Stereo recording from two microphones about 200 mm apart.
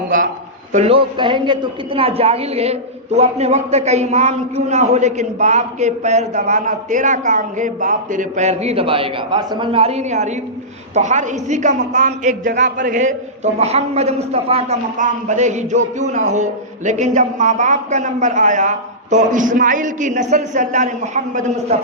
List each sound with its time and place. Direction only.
0.7 s a man's voice: 30° right (ahead or behind)